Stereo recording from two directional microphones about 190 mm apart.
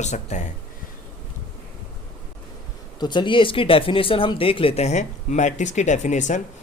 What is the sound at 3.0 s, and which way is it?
Speech, 25° left (ahead or behind).